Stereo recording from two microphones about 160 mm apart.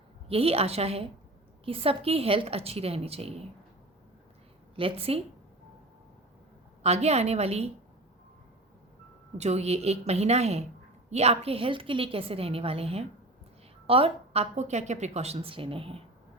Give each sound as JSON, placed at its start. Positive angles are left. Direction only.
{"t": 0.3, "sound": "a woman's voice", "side_deg": -40}
{"t": 4.8, "sound": "a woman's voice", "side_deg": -35}
{"t": 6.8, "sound": "a woman's voice", "side_deg": -40}
{"t": 9.4, "sound": "a woman's voice", "side_deg": -40}